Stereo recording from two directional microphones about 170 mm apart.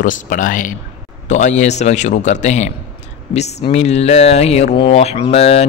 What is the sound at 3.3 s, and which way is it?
Mantra, 40° left (ahead or behind).